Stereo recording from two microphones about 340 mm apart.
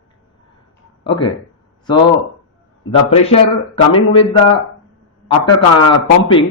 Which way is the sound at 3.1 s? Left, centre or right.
Centre.